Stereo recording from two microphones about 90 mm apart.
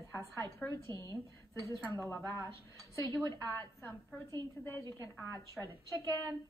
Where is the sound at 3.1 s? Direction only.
45° right (ahead or behind).